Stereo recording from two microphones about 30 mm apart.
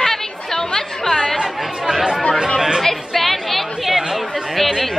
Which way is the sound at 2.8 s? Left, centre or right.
Centre.